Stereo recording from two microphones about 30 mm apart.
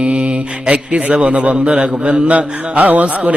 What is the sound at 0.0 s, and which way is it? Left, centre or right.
Speech, right.